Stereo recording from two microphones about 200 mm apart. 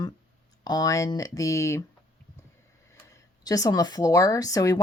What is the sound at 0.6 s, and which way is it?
A woman's voice, 20° left (ahead or behind).